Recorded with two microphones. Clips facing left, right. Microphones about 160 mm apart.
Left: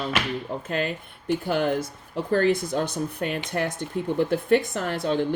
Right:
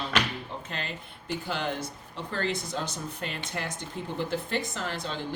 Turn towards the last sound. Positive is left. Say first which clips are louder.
# left 9 dB
turn(degrees=55)  # may be behind; listen again after turning